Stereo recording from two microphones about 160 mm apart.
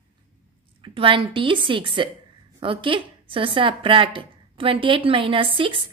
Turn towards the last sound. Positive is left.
turn(degrees=-35)  # may be behind; listen again after turning